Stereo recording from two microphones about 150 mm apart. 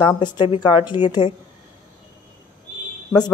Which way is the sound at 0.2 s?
30° left (ahead or behind).